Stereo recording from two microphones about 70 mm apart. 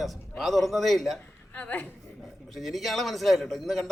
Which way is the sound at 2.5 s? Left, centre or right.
Centre.